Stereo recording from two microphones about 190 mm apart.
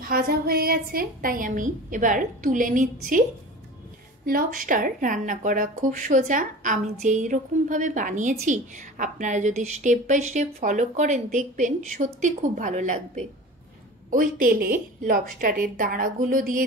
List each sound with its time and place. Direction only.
0.1 s a woman's voice: 55° right (ahead or behind)
4.3 s a woman's voice: 45° right (ahead or behind)